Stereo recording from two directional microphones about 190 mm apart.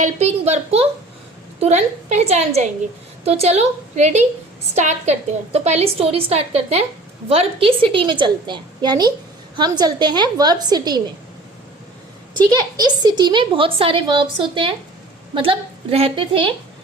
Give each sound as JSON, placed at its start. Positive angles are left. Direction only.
{"t": 0.0, "sound": "a woman's voice", "side_deg": -35}
{"t": 12.4, "sound": "a woman's voice", "side_deg": -25}